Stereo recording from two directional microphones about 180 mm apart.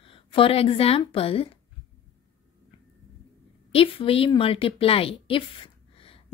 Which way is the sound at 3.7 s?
30° left (ahead or behind).